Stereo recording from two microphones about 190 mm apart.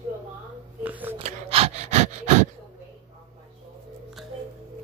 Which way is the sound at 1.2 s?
30° right (ahead or behind).